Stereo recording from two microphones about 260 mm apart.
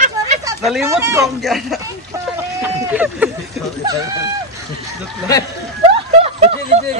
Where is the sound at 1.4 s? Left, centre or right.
Centre.